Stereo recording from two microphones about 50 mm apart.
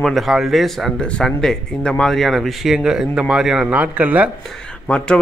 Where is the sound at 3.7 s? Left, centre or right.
Right.